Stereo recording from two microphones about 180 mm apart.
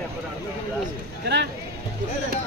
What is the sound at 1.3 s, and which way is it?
Music, 70° right (ahead or behind).